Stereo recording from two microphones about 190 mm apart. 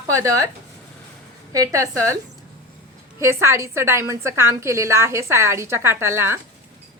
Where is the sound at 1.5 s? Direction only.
15° right (ahead or behind).